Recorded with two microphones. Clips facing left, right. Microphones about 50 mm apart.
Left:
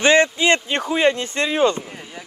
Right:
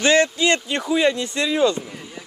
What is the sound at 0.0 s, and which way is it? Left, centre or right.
Speech, left.